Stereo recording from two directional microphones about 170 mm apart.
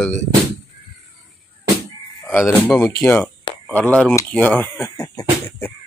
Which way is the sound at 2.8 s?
15° left (ahead or behind).